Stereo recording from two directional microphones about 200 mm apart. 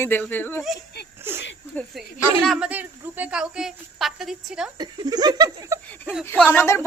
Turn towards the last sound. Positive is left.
turn(degrees=15)  # may be behind; listen again after turning